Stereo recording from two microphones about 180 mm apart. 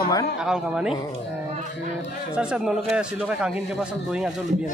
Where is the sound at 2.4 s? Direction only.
5° right (ahead or behind).